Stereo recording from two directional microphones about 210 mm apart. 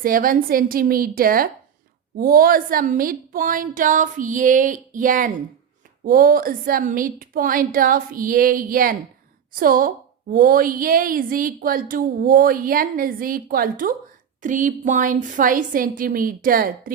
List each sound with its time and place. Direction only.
0.0 s a woman's voice: 40° right (ahead or behind)